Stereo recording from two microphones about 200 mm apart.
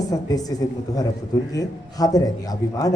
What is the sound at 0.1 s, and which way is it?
A woman's voice, 20° left (ahead or behind).